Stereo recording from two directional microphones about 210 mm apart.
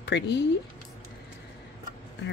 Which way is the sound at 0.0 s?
55° left (ahead or behind).